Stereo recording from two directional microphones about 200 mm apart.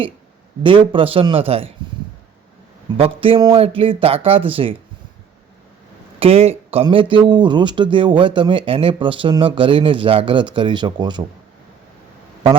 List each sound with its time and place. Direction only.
0.6 s speech: 25° right (ahead or behind)
3.0 s speech: 25° right (ahead or behind)
6.1 s speech: 30° right (ahead or behind)